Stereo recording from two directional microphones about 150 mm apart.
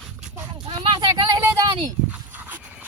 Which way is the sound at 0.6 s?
35° right (ahead or behind).